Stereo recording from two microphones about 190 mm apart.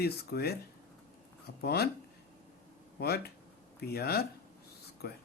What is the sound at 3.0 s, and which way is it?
Speech, 55° left (ahead or behind).